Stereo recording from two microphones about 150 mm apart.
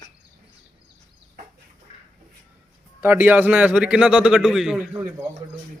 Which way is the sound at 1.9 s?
45° left (ahead or behind).